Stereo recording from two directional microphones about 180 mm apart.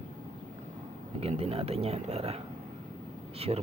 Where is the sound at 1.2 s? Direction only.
35° right (ahead or behind).